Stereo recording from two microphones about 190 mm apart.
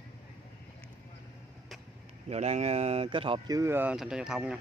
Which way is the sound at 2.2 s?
35° right (ahead or behind).